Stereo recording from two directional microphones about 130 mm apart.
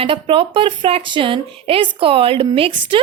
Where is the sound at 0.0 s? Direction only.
45° right (ahead or behind).